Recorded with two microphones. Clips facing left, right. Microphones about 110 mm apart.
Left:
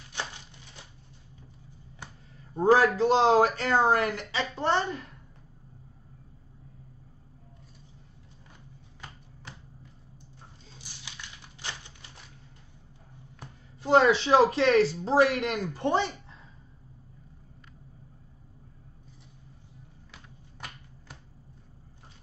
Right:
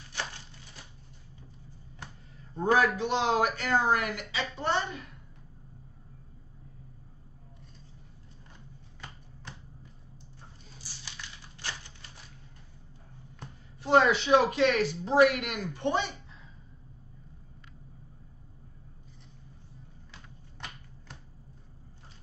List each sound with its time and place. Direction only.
0.1 s a sound: 15° left (ahead or behind)
2.6 s speech: 35° left (ahead or behind)
13.8 s speech: 25° left (ahead or behind)